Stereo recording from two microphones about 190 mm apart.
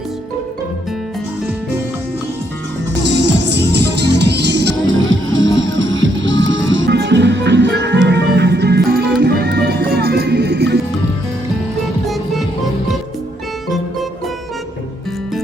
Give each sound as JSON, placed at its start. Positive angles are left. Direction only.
{"t": 3.2, "sound": "music", "side_deg": -65}
{"t": 12.0, "sound": "music", "side_deg": 0}